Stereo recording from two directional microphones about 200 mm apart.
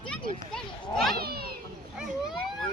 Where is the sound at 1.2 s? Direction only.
50° right (ahead or behind).